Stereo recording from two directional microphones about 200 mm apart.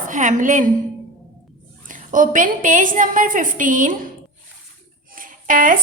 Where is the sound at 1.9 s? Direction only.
40° right (ahead or behind).